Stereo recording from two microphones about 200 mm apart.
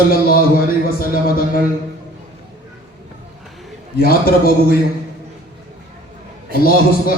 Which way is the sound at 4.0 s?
50° left (ahead or behind).